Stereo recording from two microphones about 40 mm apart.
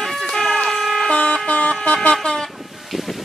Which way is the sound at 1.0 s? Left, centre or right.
Left.